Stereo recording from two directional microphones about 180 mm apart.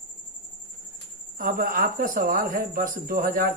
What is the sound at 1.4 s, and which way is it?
Speech, 50° right (ahead or behind).